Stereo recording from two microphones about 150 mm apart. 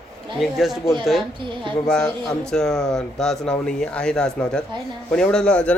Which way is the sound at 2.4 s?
5° left (ahead or behind).